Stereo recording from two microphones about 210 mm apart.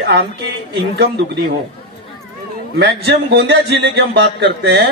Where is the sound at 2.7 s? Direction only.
50° right (ahead or behind).